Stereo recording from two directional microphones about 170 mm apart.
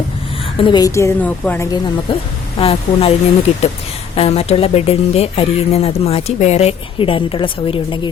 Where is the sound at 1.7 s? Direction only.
30° left (ahead or behind).